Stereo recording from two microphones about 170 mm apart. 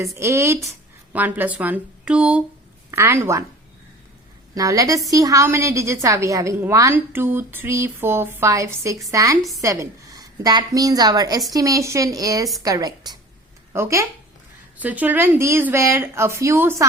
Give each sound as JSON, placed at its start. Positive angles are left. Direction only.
{"t": 0.0, "sound": "a woman's voice", "side_deg": -15}
{"t": 4.5, "sound": "a woman's voice", "side_deg": -20}